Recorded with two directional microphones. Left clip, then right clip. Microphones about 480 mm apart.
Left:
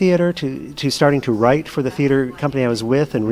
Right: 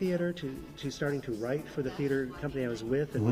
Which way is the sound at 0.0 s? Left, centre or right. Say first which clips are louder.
Left 16 dB; left.